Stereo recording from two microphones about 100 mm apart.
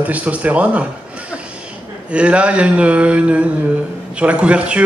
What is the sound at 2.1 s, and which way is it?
Speech, 10° right (ahead or behind).